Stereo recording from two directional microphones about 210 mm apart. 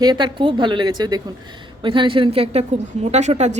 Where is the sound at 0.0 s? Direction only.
20° right (ahead or behind).